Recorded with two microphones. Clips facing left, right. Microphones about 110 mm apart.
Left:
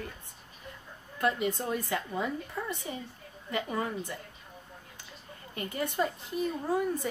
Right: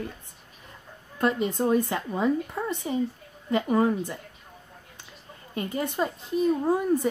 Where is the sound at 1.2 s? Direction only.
30° right (ahead or behind).